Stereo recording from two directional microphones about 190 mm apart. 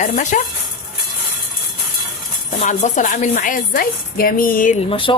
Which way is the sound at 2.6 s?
40° left (ahead or behind).